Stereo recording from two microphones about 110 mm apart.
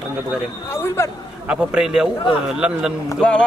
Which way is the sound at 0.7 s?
25° left (ahead or behind).